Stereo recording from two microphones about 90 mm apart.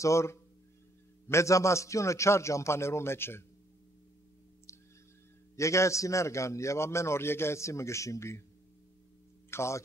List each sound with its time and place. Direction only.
0.0 s a man's voice: 35° left (ahead or behind)
5.6 s a man's voice: 35° left (ahead or behind)
9.5 s a man's voice: 30° left (ahead or behind)